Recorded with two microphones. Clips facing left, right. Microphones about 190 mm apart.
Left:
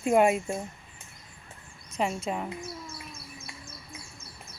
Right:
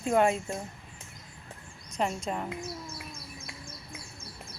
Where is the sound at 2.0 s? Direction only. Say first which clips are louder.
Left 1 dB; 5° left (ahead or behind).